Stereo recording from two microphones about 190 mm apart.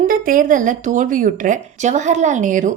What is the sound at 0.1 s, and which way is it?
A woman's voice, 45° right (ahead or behind).